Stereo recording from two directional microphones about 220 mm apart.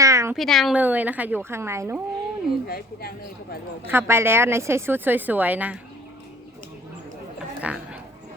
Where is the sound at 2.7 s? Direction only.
45° left (ahead or behind).